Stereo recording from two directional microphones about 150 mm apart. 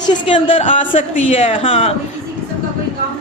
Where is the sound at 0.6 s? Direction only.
50° left (ahead or behind).